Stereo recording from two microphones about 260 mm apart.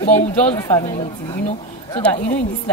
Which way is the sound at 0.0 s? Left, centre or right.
Left.